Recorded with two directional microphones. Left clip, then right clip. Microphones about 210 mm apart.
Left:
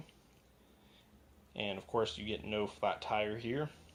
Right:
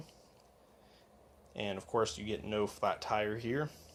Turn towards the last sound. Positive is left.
turn(degrees=-15)  # may be behind; listen again after turning